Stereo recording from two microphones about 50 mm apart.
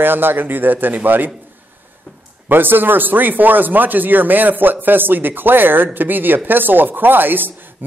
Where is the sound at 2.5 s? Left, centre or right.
Right.